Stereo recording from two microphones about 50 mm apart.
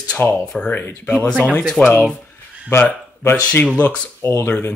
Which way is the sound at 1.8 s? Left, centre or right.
Left.